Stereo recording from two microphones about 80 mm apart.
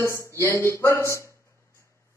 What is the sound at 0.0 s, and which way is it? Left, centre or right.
Speech, left.